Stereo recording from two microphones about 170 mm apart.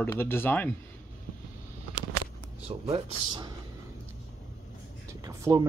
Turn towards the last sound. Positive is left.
turn(degrees=-20)  # may be behind; listen again after turning